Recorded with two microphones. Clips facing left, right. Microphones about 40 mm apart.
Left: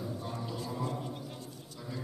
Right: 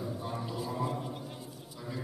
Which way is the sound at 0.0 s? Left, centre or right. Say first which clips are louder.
Right 2 dB; centre.